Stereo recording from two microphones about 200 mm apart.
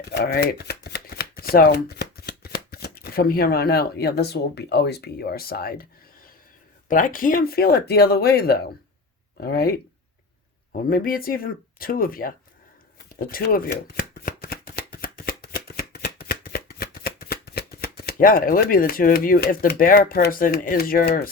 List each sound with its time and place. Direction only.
0.0 s shuffling cards: 55° left (ahead or behind)
2.6 s speech: 50° left (ahead or behind)
6.8 s speech: 40° left (ahead or behind)
15.0 s shuffling cards: 45° left (ahead or behind)